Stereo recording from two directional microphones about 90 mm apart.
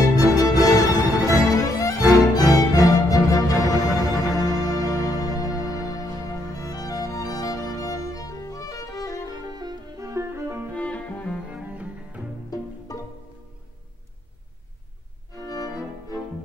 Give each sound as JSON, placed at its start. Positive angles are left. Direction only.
{"t": 0.0, "sound": "music", "side_deg": 40}
{"t": 4.0, "sound": "music", "side_deg": 0}
{"t": 4.5, "sound": "music", "side_deg": 45}
{"t": 9.6, "sound": "music", "side_deg": -45}
{"t": 10.8, "sound": "music", "side_deg": 15}
{"t": 11.5, "sound": "cello", "side_deg": -15}
{"t": 12.4, "sound": "music", "side_deg": 40}
{"t": 15.4, "sound": "music", "side_deg": 45}